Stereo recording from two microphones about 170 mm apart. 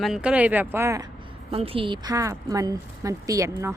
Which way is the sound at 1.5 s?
35° right (ahead or behind).